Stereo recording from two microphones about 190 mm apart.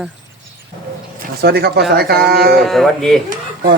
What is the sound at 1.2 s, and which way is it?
Speech, 55° right (ahead or behind).